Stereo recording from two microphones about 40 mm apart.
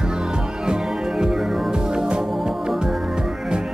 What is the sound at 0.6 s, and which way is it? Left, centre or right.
Music, centre.